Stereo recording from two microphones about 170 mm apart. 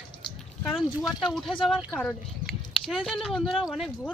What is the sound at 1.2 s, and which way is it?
Speech, centre (ahead or behind).